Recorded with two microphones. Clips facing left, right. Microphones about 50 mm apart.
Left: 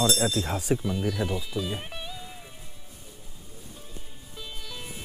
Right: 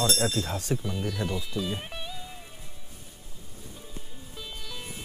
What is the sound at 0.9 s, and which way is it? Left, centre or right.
Music, centre.